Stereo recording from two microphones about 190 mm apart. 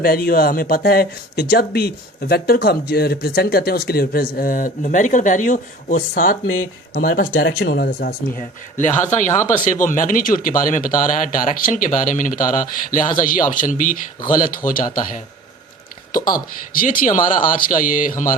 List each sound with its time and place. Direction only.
0.0 s speech: 50° left (ahead or behind)
7.4 s speech: 60° left (ahead or behind); by 15.2 s 45° left (ahead or behind)
16.7 s speech: 45° left (ahead or behind)